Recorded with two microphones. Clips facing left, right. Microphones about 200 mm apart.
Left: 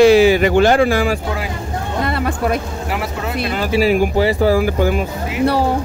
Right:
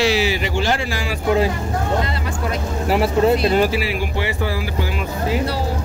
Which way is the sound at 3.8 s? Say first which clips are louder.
Left 9 dB; 45° left (ahead or behind).